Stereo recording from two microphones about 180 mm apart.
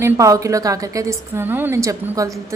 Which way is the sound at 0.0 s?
15° right (ahead or behind).